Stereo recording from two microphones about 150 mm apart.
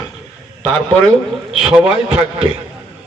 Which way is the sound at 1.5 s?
5° right (ahead or behind).